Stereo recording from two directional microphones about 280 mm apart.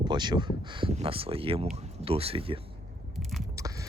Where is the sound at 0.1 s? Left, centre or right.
Centre.